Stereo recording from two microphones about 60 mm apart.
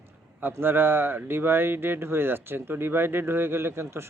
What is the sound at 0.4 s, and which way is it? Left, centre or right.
Speech, right.